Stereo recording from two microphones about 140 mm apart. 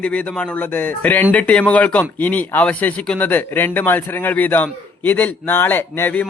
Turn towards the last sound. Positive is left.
turn(degrees=15)  # may be behind; listen again after turning